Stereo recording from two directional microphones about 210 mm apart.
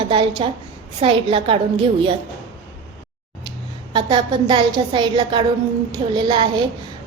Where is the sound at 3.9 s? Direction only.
20° right (ahead or behind).